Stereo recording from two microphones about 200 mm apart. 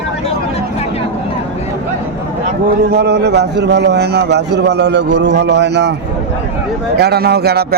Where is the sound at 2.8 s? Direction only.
55° right (ahead or behind).